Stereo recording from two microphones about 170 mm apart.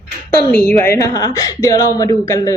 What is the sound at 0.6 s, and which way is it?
A woman's voice, 10° left (ahead or behind).